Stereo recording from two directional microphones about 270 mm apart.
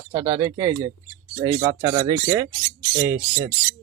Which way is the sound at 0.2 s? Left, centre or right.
Centre.